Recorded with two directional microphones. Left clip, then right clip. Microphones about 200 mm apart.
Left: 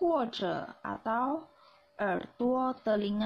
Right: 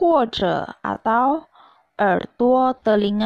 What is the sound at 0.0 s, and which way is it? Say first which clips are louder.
Speech: right 12 dB; 45° right (ahead or behind).